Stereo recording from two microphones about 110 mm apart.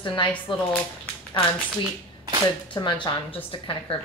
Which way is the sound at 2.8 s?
35° left (ahead or behind).